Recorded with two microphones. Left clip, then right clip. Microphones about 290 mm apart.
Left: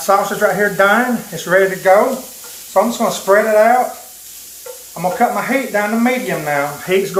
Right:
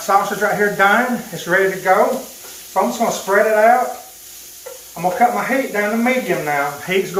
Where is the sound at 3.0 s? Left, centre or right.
Centre.